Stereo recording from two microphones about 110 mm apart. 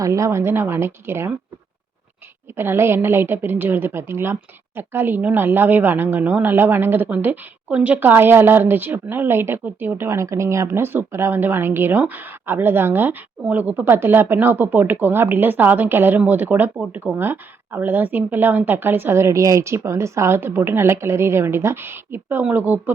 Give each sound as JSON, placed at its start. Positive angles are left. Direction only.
{"t": 0.0, "sound": "a woman's voice", "side_deg": -30}
{"t": 2.6, "sound": "a woman's voice", "side_deg": -20}